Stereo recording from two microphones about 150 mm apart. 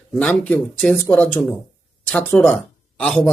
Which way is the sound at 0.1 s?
10° left (ahead or behind).